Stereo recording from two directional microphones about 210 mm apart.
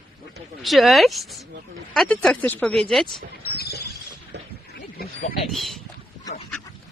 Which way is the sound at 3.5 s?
50° left (ahead or behind).